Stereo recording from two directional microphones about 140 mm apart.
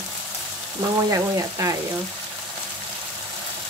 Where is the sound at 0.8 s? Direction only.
25° right (ahead or behind).